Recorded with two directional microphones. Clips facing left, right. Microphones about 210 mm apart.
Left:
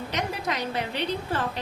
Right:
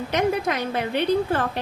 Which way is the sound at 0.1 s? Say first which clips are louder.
Right 9 dB; 55° right (ahead or behind).